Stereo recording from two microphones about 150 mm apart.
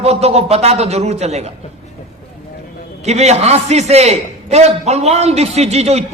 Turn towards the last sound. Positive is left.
turn(degrees=-45)  # may be behind; listen again after turning